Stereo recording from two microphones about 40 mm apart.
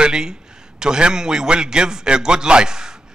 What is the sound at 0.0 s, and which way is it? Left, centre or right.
A man's voice, centre.